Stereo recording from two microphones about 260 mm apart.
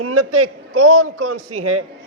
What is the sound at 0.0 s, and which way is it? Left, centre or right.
A man's voice, right.